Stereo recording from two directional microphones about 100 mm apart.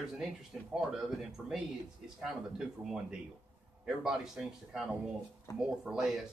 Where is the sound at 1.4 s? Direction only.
15° right (ahead or behind).